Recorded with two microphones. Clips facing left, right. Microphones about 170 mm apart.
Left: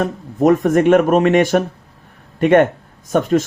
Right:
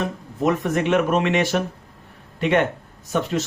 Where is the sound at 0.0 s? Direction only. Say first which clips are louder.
Left 7 dB; 50° left (ahead or behind).